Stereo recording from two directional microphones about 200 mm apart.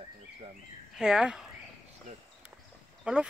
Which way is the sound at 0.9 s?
5° right (ahead or behind).